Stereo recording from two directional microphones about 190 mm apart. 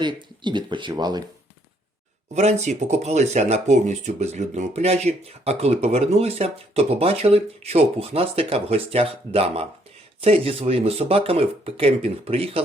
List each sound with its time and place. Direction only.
0.0 s speech: 25° right (ahead or behind)
2.3 s speech: 35° right (ahead or behind)